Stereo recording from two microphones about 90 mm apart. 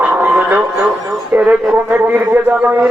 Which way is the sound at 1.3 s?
20° right (ahead or behind).